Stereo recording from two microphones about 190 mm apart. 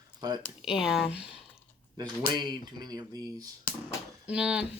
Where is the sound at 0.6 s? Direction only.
5° right (ahead or behind).